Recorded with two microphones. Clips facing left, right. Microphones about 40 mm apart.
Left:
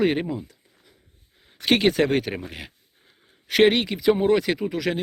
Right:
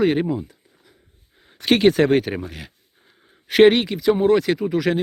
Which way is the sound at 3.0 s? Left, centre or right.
Centre.